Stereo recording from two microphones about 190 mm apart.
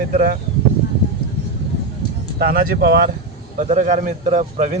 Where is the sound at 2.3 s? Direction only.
50° right (ahead or behind).